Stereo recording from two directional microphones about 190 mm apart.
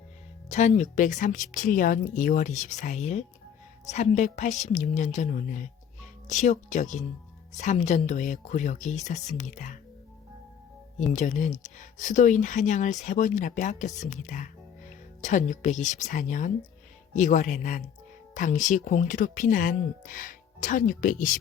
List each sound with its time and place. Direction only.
0.4 s speech: 35° left (ahead or behind)
11.1 s speech: 40° left (ahead or behind)